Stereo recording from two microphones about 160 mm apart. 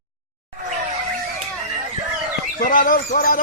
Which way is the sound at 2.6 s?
55° left (ahead or behind).